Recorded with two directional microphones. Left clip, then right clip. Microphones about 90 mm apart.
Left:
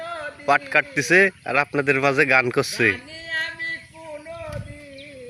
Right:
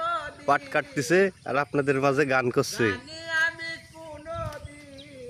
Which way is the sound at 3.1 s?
25° right (ahead or behind).